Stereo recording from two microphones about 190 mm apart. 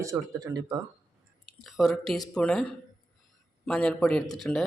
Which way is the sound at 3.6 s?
5° left (ahead or behind).